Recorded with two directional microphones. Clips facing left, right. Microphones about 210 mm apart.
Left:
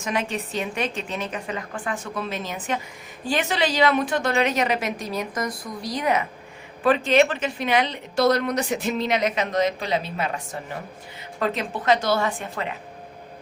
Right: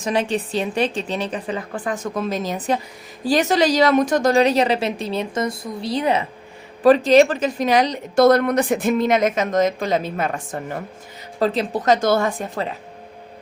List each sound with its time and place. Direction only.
0.0 s a woman's voice: 35° right (ahead or behind); by 10.8 s 50° right (ahead or behind)
11.3 s a woman's voice: 35° right (ahead or behind)